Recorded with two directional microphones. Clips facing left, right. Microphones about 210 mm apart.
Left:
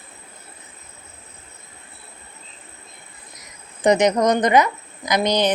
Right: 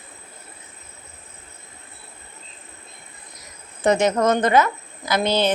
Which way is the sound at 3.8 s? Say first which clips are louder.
Left 2 dB; 15° left (ahead or behind).